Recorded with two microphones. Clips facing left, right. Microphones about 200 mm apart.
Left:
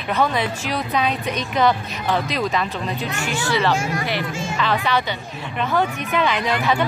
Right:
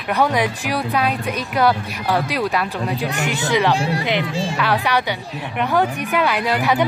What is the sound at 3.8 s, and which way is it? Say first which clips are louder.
Speech: right 3 dB; 35° right (ahead or behind).